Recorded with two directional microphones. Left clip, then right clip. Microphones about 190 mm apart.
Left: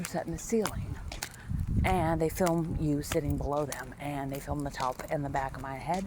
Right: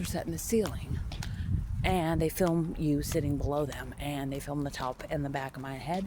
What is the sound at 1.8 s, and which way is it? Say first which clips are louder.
Speech: left 1 dB; 20° right (ahead or behind).